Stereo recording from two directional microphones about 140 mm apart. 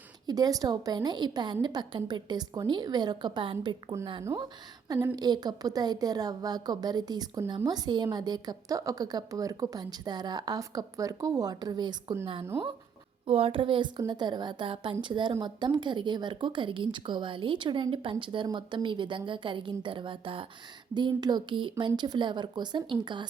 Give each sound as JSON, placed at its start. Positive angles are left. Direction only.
{"t": 0.3, "sound": "a woman's voice", "side_deg": -25}
{"t": 5.1, "sound": "a woman's voice", "side_deg": -30}
{"t": 12.2, "sound": "a woman's voice", "side_deg": -45}